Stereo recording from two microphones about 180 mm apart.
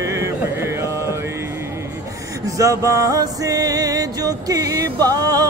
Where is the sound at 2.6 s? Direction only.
20° right (ahead or behind).